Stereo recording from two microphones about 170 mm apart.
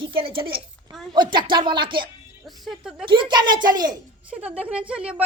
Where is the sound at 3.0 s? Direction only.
30° right (ahead or behind).